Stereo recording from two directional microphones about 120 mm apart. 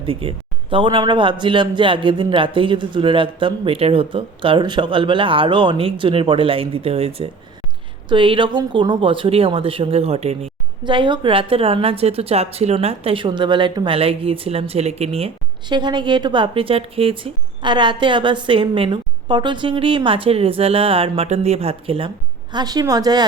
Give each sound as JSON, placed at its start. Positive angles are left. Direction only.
{"t": 0.0, "sound": "a man's voice", "side_deg": -50}
{"t": 10.8, "sound": "a man's voice", "side_deg": -40}
{"t": 15.7, "sound": "a man's voice", "side_deg": -40}
{"t": 22.5, "sound": "a woman's voice", "side_deg": -35}